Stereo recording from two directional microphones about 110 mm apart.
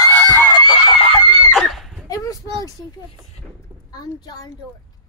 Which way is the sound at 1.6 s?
Centre (ahead or behind).